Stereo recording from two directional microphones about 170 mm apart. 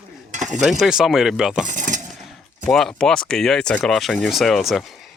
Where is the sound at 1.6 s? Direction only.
50° right (ahead or behind).